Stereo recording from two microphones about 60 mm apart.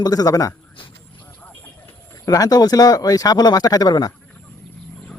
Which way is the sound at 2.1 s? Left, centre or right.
Left.